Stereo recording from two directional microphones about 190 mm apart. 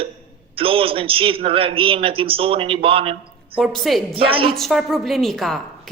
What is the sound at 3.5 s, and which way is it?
Speech, centre (ahead or behind).